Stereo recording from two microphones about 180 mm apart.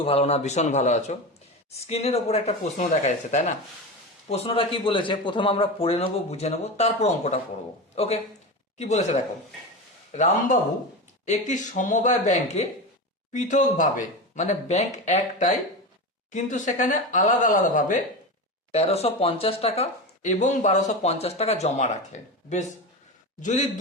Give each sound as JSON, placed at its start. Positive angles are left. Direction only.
{"t": 0.0, "sound": "speech", "side_deg": 35}
{"t": 18.7, "sound": "speech", "side_deg": 35}
{"t": 23.4, "sound": "speech", "side_deg": 45}